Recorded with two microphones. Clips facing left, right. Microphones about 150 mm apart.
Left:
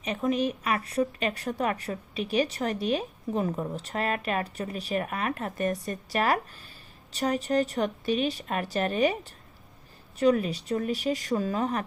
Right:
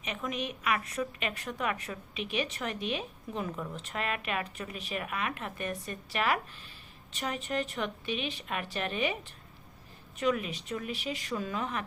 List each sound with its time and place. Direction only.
0.0 s a woman's voice: 35° left (ahead or behind)